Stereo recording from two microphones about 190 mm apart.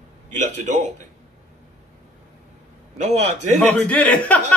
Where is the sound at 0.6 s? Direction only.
40° right (ahead or behind).